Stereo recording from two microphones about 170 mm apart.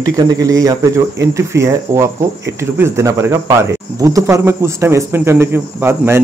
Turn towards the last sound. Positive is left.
turn(degrees=-15)  # may be behind; listen again after turning